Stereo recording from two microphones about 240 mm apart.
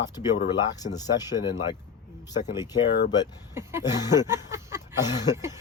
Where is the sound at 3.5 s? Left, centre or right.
Centre.